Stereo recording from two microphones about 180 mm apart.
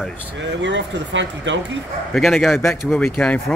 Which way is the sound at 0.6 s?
85° right.